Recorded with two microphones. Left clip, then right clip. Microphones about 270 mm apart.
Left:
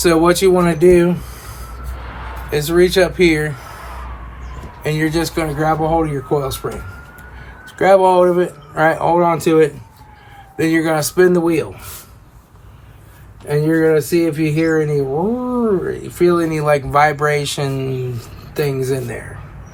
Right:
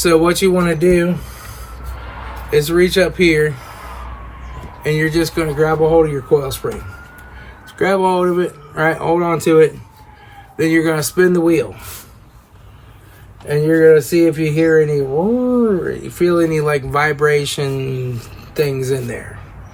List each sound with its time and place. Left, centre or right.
0.0 s speech: centre
4.8 s speech: centre
7.8 s speech: centre
13.5 s speech: centre